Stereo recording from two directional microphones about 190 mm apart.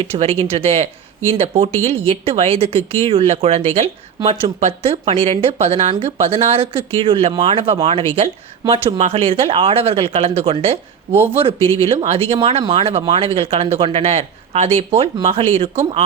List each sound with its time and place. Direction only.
0.0 s speech: 30° right (ahead or behind)